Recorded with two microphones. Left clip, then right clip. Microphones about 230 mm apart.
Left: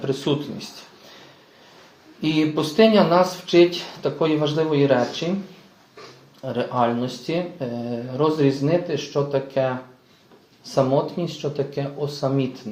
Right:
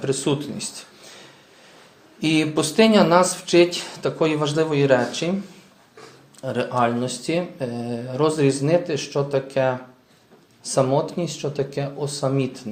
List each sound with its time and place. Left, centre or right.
0.0 s speech: right
2.2 s speech: right
6.4 s speech: right